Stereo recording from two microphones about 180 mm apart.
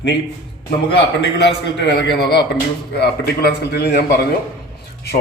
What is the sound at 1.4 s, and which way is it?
A man's voice, 75° left (ahead or behind).